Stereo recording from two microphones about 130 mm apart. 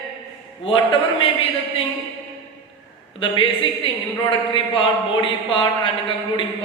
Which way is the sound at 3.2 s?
40° left (ahead or behind).